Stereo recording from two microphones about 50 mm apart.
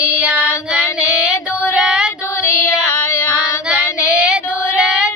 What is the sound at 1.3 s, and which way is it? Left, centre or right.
Female singing, left.